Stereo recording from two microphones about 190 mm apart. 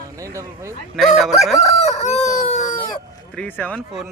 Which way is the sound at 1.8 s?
35° left (ahead or behind).